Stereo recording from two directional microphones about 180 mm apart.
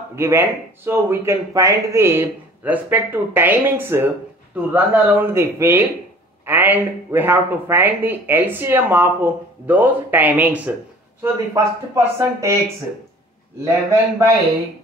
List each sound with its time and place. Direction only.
0.1 s speech: 15° right (ahead or behind)
13.7 s speech: 15° right (ahead or behind)